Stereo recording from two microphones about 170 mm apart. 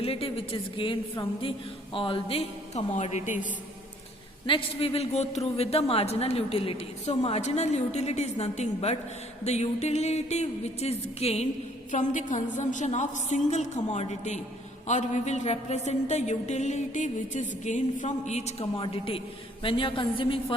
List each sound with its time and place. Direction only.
0.0 s a woman's voice: 35° left (ahead or behind)
4.4 s a woman's voice: 30° left (ahead or behind)